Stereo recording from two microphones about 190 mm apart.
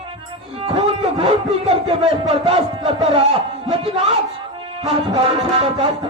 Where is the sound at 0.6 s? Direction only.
30° right (ahead or behind).